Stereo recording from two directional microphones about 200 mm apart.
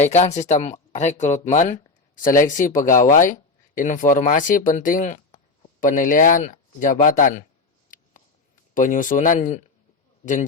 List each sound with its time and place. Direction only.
0.0 s speech: 35° left (ahead or behind)
8.7 s speech: 40° left (ahead or behind)